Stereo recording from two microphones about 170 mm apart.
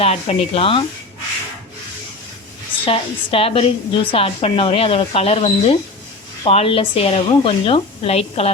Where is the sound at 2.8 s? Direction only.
30° left (ahead or behind).